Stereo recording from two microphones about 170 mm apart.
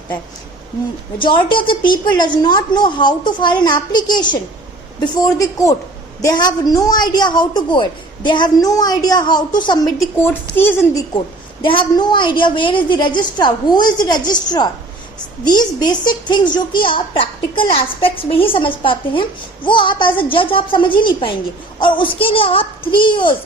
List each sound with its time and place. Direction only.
1.2 s a woman's voice: 30° left (ahead or behind)
10.5 s speech: 10° left (ahead or behind)
11.6 s a woman's voice: 30° left (ahead or behind)